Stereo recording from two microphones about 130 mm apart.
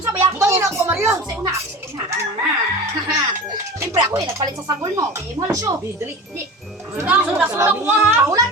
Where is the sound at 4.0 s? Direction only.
30° right (ahead or behind).